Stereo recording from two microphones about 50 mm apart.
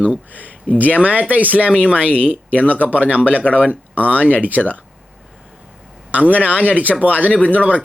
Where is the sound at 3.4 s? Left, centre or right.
Left.